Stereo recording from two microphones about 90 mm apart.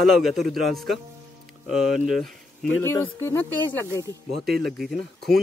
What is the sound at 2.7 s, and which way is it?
Speech, 25° left (ahead or behind).